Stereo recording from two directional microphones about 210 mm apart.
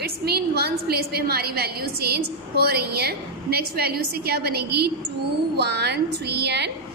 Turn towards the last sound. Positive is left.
turn(degrees=-50)  # may be behind; listen again after turning